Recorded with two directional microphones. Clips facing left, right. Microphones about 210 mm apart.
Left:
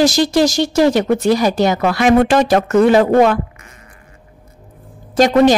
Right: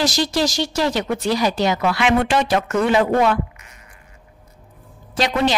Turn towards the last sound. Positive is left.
turn(degrees=45)  # may be behind; listen again after turning